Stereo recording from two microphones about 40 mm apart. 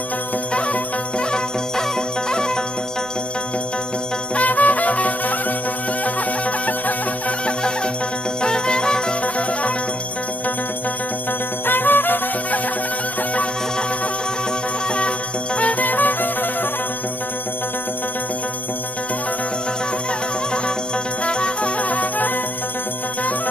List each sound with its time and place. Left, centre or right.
1.3 s music: centre
4.4 s music: left
7.4 s music: left
9.2 s music: left
11.6 s music: left
15.0 s music: left
21.2 s music: left
21.7 s music: left